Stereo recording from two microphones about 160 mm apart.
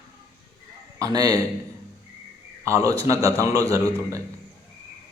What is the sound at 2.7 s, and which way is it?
Speech, 20° right (ahead or behind).